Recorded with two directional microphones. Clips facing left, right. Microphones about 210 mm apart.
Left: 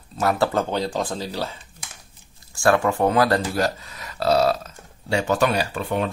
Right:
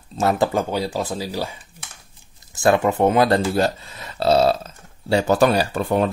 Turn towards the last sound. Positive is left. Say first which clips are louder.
# right 4 dB
turn(degrees=-40)  # may be behind; listen again after turning